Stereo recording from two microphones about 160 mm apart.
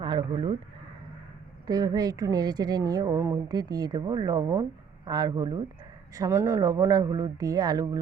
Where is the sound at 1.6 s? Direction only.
25° right (ahead or behind).